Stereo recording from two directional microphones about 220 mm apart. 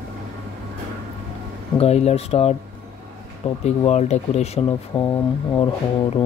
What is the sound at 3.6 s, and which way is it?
Speech, 30° left (ahead or behind).